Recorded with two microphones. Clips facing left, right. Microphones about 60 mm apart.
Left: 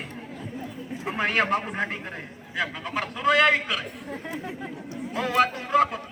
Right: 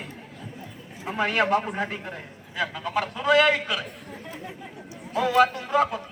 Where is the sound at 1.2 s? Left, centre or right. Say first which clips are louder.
Right 2 dB; left.